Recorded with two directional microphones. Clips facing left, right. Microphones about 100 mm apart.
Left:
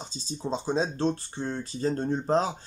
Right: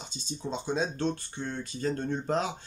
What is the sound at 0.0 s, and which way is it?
Speech, 35° left (ahead or behind).